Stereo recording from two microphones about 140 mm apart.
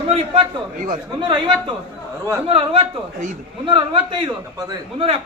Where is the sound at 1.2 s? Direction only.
35° right (ahead or behind).